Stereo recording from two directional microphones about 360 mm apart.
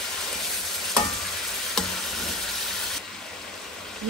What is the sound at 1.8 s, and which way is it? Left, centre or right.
Stir, centre.